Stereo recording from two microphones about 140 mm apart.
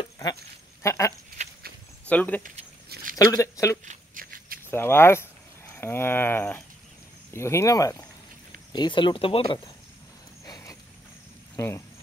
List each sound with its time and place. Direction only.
0.0 s goat: 25° left (ahead or behind)
1.4 s a sound: 55° right (ahead or behind)
2.0 s speech: 10° left (ahead or behind)
3.3 s speech: 20° left (ahead or behind)
3.8 s a sound: 70° right (ahead or behind); by 4.6 s 85° right
4.6 s speech: 15° left (ahead or behind)
8.7 s speech: 35° left (ahead or behind)
10.4 s a sound: 25° left (ahead or behind)
11.5 s speech: 20° left (ahead or behind)